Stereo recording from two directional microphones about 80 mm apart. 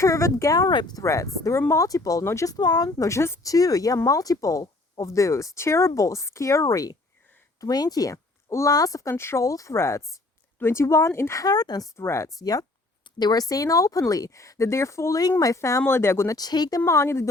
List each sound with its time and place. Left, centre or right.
0.0 s speech: left
0.7 s speech: left
0.9 s speech: left
2.6 s speech: left
3.1 s speech: left
3.4 s speech: left
9.1 s speech: left
11.4 s speech: left
11.9 s speech: left
12.4 s speech: left
16.3 s speech: left
16.8 s speech: left